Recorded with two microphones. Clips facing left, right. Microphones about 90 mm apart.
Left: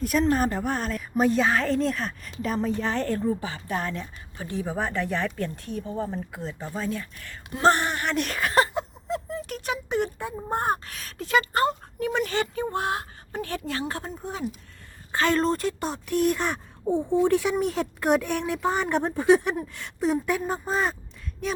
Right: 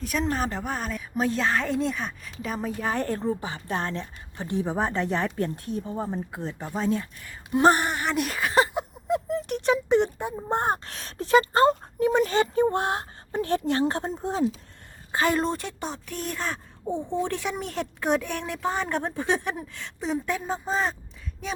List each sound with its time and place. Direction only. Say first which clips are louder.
0.0 s speech: left 4 dB; centre (ahead or behind); by 7.1 s 25° right (ahead or behind)
7.3 s speech: right 2 dB; 15° right (ahead or behind)
8.7 s a sound: right 3 dB; 20° right (ahead or behind)
9.6 s speech: right 6 dB; 30° right (ahead or behind)
15.1 s a woman's voice: left 1 dB; 15° right (ahead or behind)
15.4 s speech: left 4 dB; centre (ahead or behind)